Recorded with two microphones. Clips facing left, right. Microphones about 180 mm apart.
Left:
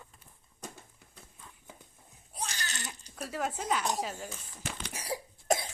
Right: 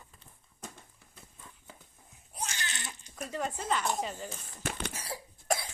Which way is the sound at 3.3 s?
5° left (ahead or behind).